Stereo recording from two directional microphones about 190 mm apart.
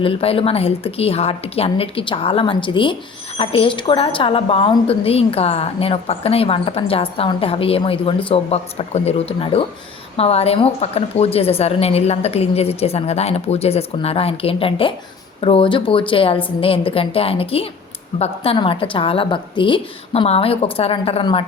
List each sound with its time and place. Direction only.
0.0 s a woman's voice: 30° left (ahead or behind)